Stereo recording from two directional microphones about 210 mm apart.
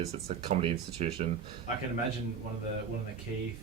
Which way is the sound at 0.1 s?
30° right (ahead or behind).